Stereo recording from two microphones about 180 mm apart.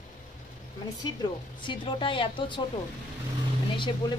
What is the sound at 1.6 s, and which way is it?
Speech, 25° left (ahead or behind).